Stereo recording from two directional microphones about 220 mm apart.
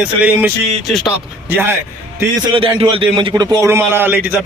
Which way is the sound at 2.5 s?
25° right (ahead or behind).